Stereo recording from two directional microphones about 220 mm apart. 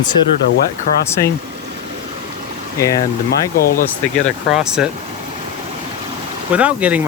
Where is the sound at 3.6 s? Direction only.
40° left (ahead or behind).